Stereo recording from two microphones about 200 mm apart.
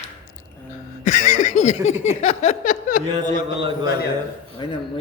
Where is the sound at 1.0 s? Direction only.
40° left (ahead or behind).